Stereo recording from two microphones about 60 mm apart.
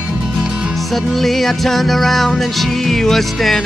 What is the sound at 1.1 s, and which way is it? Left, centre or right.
Music, centre.